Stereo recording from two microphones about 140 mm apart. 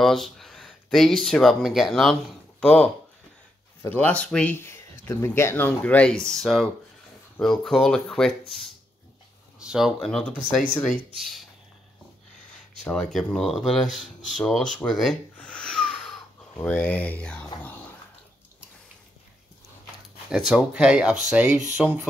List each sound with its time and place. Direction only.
0.0 s speech: centre (ahead or behind)
3.9 s speech: 10° left (ahead or behind)
12.8 s speech: 5° left (ahead or behind)
20.2 s speech: 5° right (ahead or behind)